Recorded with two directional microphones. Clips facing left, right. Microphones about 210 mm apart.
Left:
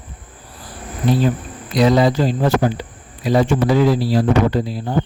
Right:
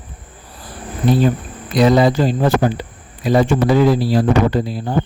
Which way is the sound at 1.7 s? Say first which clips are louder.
Right 2 dB; 55° right (ahead or behind).